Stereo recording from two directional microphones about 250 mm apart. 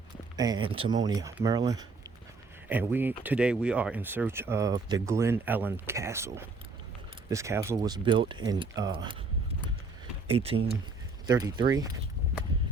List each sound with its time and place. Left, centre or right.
0.3 s speech: centre
10.2 s speech: right